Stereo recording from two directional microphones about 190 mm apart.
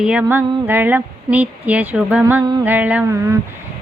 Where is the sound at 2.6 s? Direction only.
10° right (ahead or behind).